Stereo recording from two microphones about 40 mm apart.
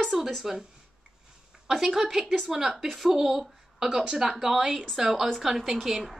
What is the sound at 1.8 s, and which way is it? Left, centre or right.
A woman's voice, centre.